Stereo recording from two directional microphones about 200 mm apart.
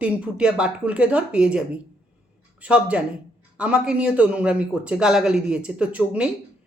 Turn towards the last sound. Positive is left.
turn(degrees=-5)  # may be behind; listen again after turning